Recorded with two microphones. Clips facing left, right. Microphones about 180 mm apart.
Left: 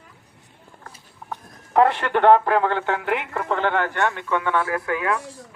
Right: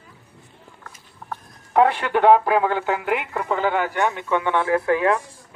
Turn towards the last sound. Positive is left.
turn(degrees=-30)  # may be behind; listen again after turning